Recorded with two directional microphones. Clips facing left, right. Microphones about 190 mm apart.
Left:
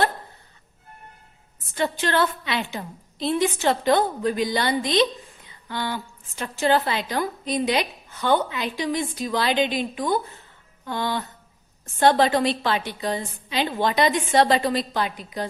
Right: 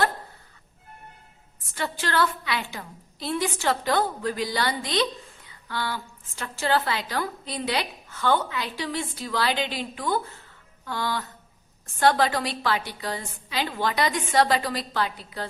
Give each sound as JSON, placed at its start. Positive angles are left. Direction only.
{"t": 1.7, "sound": "a woman's voice", "side_deg": 20}